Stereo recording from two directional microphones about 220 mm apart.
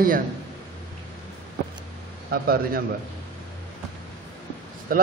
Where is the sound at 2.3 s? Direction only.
45° right (ahead or behind).